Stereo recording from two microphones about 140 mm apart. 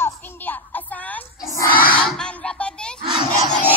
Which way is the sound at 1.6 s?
10° right (ahead or behind).